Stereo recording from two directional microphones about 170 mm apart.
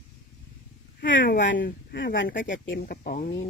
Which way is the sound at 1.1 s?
90° left.